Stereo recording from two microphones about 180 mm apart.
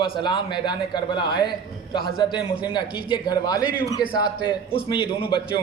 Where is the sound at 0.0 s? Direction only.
25° left (ahead or behind).